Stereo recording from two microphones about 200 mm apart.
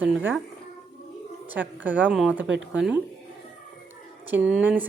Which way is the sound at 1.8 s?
10° right (ahead or behind).